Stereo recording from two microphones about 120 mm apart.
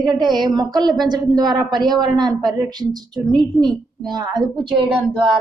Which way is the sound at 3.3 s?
5° left (ahead or behind).